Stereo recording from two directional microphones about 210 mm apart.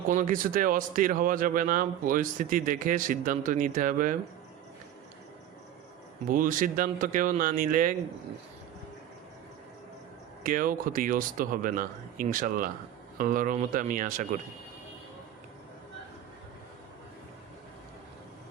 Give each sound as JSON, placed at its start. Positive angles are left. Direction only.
{"t": 0.1, "sound": "speech", "side_deg": -40}
{"t": 6.2, "sound": "speech", "side_deg": -40}
{"t": 10.4, "sound": "speech", "side_deg": -40}